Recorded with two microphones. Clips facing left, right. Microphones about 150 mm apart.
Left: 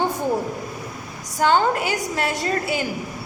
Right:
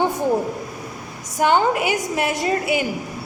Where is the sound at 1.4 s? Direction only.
15° right (ahead or behind).